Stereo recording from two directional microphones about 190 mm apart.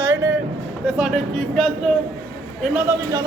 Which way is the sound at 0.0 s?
15° right (ahead or behind).